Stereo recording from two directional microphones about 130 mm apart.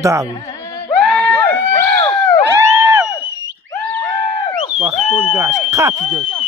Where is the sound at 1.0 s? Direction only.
5° left (ahead or behind).